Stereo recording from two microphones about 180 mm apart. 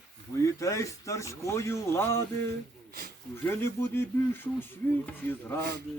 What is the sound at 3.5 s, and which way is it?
Speech, 15° left (ahead or behind).